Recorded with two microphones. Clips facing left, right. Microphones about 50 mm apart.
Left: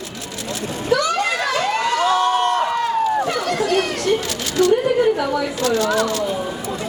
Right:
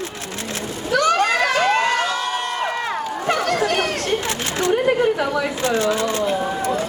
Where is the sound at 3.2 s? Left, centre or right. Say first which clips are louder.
Right 1 dB; right.